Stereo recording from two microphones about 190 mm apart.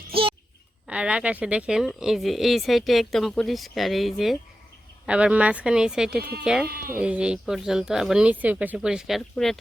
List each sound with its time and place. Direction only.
0.1 s a sound: 30° right (ahead or behind)
0.9 s speech: 5° right (ahead or behind)
6.7 s speech: 50° right (ahead or behind)
7.0 s speech: 5° right (ahead or behind)